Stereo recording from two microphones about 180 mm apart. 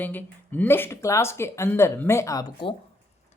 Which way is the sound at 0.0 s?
10° left (ahead or behind).